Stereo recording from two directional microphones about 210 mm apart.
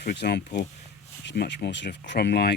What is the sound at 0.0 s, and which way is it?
Speech, 50° left (ahead or behind).